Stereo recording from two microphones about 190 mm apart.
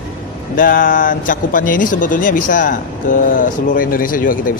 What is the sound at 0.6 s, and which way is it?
Speech, 45° left (ahead or behind).